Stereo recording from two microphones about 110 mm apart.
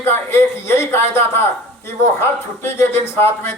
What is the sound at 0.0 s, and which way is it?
A man's voice, 20° left (ahead or behind).